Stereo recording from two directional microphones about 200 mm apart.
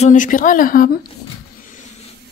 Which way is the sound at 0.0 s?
40° left (ahead or behind).